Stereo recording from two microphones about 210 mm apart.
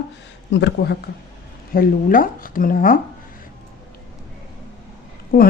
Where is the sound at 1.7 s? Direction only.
40° left (ahead or behind).